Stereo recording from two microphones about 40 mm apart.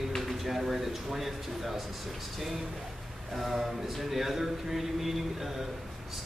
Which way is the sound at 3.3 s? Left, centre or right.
Centre.